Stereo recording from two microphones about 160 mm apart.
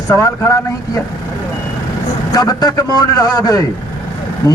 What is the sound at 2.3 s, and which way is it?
Speech, 25° left (ahead or behind).